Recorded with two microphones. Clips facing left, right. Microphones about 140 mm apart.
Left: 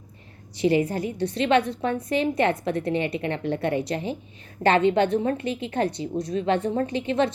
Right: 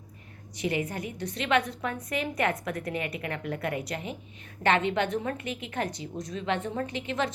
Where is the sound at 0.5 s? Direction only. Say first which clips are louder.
Left 9 dB; 30° left (ahead or behind).